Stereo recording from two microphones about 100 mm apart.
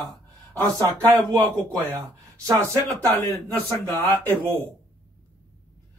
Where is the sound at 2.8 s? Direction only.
35° left (ahead or behind).